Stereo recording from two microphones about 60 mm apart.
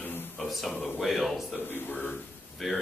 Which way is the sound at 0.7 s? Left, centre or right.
Left.